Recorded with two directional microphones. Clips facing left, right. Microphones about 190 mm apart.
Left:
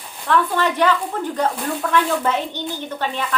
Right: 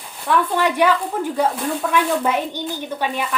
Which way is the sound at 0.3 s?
10° right (ahead or behind).